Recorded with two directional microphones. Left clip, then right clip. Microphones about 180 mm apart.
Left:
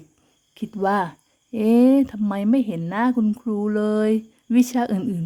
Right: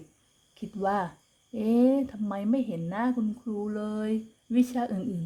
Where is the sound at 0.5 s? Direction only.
25° left (ahead or behind).